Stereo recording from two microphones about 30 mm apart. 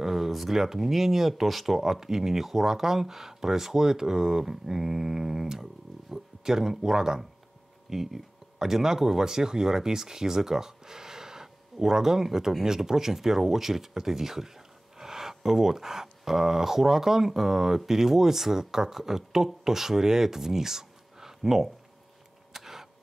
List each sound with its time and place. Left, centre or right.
0.0 s speech: centre
2.0 s speech: centre
22.5 s a sound: centre